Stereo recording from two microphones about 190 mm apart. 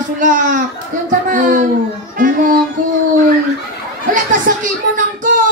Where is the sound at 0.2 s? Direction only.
45° right (ahead or behind).